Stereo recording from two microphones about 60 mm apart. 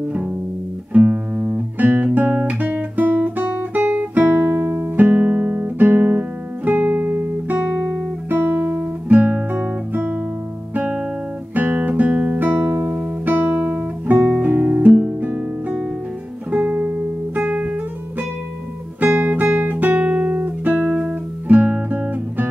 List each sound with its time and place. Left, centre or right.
0.1 s music: centre
2.1 s guitar: right
5.9 s music: right
8.4 s guitar: right
9.9 s music: right
15.1 s guitar: right
16.5 s music: right
18.9 s music: right